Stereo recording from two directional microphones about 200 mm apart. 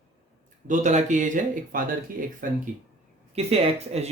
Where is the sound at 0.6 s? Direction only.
35° right (ahead or behind).